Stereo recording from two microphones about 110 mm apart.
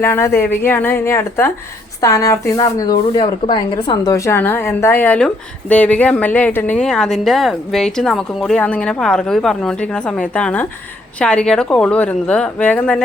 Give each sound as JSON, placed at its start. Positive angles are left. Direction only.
{"t": 0.0, "sound": "speech", "side_deg": 25}
{"t": 4.4, "sound": "a woman's voice", "side_deg": 20}